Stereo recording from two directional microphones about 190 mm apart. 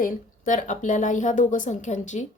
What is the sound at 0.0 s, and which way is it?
Speech, 40° left (ahead or behind).